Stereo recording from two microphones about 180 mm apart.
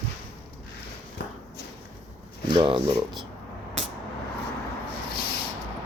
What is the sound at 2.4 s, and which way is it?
Speech, 25° right (ahead or behind).